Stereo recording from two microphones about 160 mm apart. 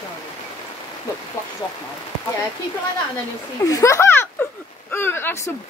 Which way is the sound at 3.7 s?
20° left (ahead or behind).